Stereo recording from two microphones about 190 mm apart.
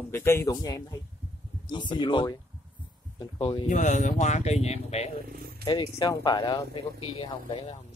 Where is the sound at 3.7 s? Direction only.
40° left (ahead or behind).